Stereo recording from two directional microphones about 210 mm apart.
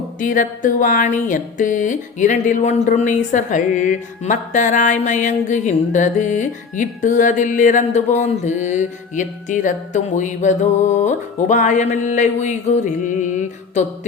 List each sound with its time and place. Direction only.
0.2 s speech: 40° left (ahead or behind)